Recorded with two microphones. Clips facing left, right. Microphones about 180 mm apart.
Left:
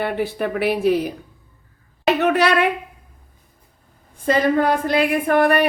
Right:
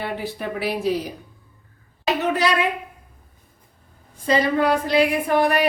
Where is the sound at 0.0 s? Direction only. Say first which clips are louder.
Left 6 dB; 60° left (ahead or behind).